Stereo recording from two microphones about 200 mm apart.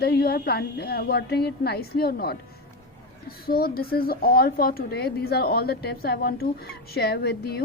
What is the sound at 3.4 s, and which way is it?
A woman's voice, 50° left (ahead or behind).